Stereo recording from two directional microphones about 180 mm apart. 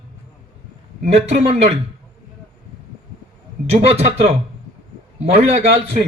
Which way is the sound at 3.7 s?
35° right (ahead or behind).